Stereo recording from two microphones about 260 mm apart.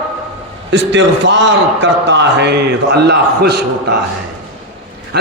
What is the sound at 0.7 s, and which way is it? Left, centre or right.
A man's voice, right.